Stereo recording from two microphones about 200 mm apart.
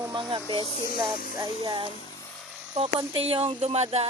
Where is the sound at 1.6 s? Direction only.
20° right (ahead or behind).